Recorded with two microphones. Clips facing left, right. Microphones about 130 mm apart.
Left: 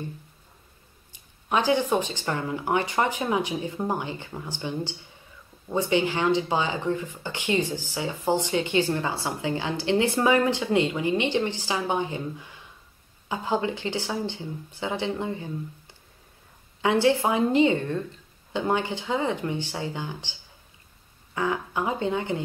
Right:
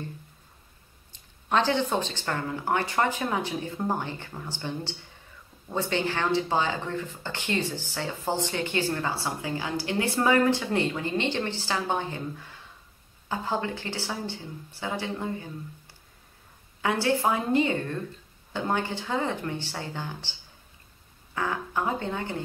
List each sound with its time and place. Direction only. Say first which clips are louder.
1.1 s speech: even; 10° left (ahead or behind)
16.8 s speech: left 3 dB; 20° left (ahead or behind)
21.4 s speech: left 2 dB; 15° left (ahead or behind)